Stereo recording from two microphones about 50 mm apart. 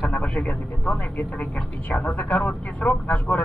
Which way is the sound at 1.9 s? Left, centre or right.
Left.